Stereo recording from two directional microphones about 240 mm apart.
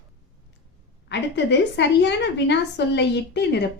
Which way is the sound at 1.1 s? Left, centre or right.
Left.